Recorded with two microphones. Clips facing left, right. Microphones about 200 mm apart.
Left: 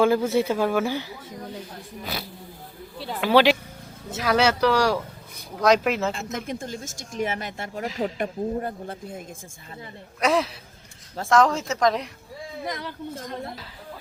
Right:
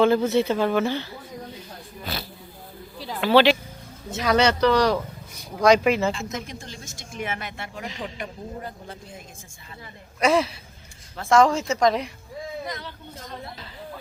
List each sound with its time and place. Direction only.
0.0 s speech: 10° left (ahead or behind)
3.0 s a sound: centre (ahead or behind)
3.2 s a woman's voice: 10° left (ahead or behind)
6.3 s speech: 50° left (ahead or behind)
10.2 s a woman's voice: centre (ahead or behind)